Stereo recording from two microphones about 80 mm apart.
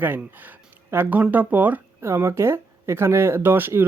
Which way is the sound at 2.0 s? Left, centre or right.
Right.